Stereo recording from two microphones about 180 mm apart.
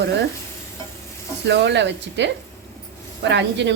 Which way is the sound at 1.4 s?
70° right (ahead or behind).